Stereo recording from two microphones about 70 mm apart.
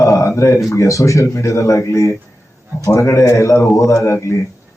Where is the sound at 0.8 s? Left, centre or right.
Left.